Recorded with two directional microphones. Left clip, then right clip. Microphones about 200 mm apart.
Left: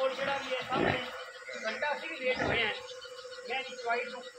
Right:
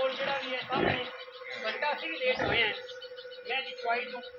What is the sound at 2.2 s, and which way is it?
Speech, 45° right (ahead or behind).